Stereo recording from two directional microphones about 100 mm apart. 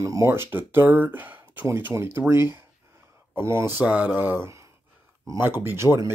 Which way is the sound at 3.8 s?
10° right (ahead or behind).